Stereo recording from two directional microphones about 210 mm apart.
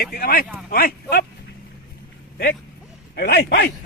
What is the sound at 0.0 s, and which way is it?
Speech, 45° left (ahead or behind).